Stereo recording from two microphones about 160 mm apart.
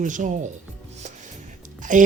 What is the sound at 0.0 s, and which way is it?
Speech, 50° right (ahead or behind).